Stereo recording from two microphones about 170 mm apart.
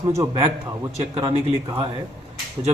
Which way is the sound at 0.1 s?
25° right (ahead or behind).